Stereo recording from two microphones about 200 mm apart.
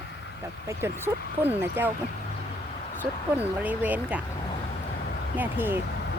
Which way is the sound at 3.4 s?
10° right (ahead or behind).